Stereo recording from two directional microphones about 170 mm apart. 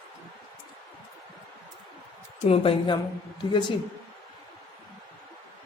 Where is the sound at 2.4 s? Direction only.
35° left (ahead or behind).